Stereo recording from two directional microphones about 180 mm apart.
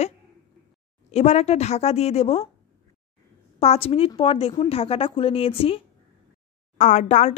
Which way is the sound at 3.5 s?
35° left (ahead or behind).